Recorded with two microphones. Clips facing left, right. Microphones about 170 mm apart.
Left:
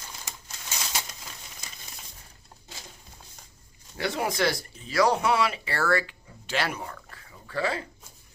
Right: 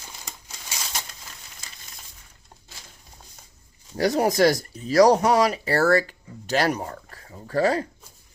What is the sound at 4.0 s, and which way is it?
Speech, 40° right (ahead or behind).